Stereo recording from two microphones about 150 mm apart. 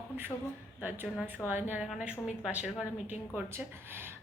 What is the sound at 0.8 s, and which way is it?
A woman's voice, 10° right (ahead or behind).